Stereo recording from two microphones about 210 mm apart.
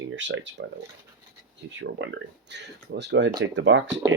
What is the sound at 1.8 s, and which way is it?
Speech, 60° right (ahead or behind).